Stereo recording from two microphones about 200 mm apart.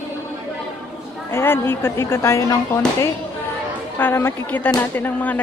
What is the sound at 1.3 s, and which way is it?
A woman's voice, 10° left (ahead or behind).